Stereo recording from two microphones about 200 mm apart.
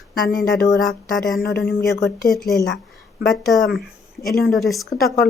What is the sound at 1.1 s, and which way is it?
Speech, centre (ahead or behind).